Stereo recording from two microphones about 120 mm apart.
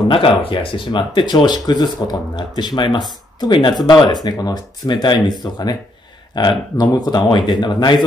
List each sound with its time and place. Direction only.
0.1 s speech: 50° left (ahead or behind)